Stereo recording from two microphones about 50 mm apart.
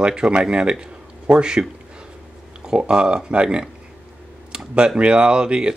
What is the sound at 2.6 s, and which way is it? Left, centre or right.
Speech, centre.